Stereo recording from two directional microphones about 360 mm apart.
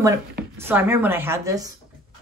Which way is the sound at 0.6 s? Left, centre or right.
Centre.